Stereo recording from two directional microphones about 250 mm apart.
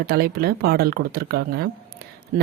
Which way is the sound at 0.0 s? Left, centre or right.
Right.